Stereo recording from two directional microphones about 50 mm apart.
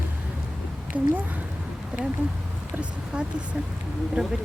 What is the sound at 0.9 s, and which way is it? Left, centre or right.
Speech, right.